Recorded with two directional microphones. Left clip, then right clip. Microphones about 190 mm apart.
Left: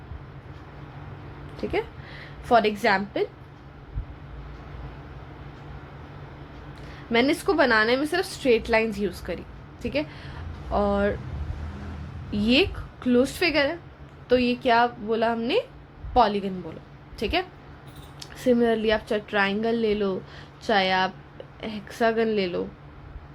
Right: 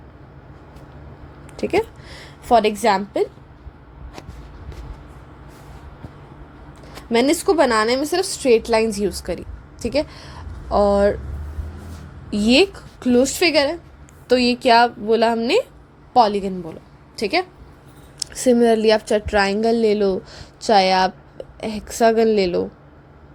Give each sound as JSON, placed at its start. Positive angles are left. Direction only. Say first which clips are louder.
{"t": 1.5, "sound": "a woman's voice", "louder": "right 8 dB", "side_deg": -35}
{"t": 7.1, "sound": "a woman's voice", "louder": "right 5 dB", "side_deg": -40}
{"t": 12.3, "sound": "a woman's voice", "louder": "right 6 dB", "side_deg": -35}